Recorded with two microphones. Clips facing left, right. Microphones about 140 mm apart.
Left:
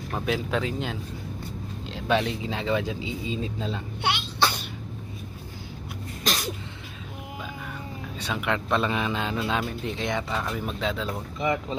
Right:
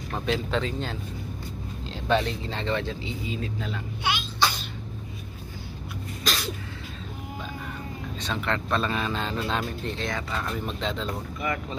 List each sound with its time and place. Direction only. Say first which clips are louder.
0.1 s speech: even; 5° left (ahead or behind)
2.0 s speech: even; 5° left (ahead or behind)
3.3 s speech: left 2 dB; 25° left (ahead or behind)
4.0 s sneeze: left 1 dB; 65° left (ahead or behind)
6.2 s sneeze: left 1 dB; 20° left (ahead or behind)
8.2 s speech: left 1 dB; 10° left (ahead or behind)
9.9 s speech: left 3 dB; 15° left (ahead or behind)
10.4 s speech: left 1 dB; 5° left (ahead or behind)
11.3 s speech: left 6 dB; 20° left (ahead or behind)